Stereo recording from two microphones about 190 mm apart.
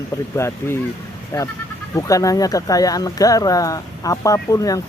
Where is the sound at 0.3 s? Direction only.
15° left (ahead or behind).